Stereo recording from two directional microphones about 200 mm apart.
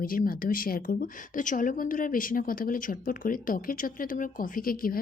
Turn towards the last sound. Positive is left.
turn(degrees=45)  # may be behind; listen again after turning